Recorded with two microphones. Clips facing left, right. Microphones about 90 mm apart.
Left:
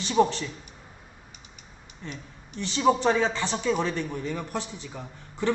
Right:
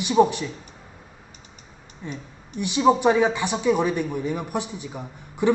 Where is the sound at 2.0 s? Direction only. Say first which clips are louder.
Right 5 dB; 15° right (ahead or behind).